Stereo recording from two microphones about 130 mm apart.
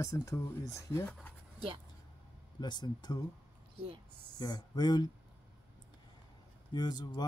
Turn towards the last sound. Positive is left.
turn(degrees=35)  # may be behind; listen again after turning